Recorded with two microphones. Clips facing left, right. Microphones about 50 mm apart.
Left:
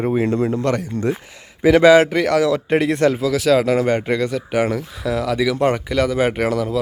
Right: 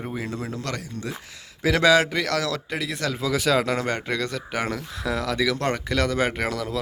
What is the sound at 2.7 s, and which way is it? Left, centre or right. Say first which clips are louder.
Speech: left 12 dB; left.